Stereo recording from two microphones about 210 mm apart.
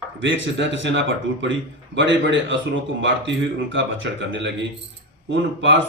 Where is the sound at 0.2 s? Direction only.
60° right (ahead or behind).